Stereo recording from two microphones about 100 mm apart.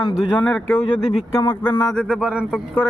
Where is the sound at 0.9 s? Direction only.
70° left (ahead or behind).